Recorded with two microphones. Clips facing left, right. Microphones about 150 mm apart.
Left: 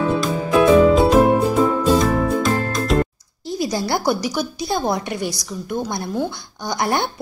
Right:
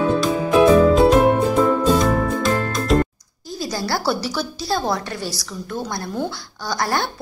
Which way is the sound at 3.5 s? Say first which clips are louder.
Left 3 dB; 20° left (ahead or behind).